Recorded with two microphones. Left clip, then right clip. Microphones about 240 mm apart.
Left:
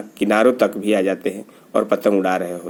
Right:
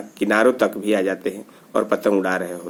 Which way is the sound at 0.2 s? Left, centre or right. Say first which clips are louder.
Left 2 dB; centre.